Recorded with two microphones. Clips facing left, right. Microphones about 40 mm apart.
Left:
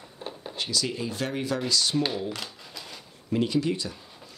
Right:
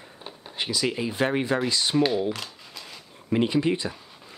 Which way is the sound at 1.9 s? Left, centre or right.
Centre.